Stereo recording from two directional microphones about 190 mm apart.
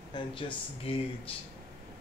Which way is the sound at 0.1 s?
25° left (ahead or behind).